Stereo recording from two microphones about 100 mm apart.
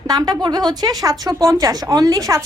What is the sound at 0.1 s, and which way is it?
Speech, 40° right (ahead or behind).